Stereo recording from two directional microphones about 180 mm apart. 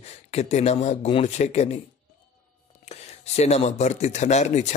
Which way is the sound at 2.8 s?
35° left (ahead or behind).